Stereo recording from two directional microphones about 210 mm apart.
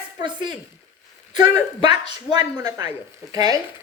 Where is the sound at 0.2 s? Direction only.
20° right (ahead or behind).